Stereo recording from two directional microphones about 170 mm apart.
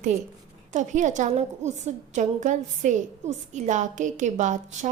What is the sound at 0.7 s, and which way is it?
A woman's voice, 45° right (ahead or behind).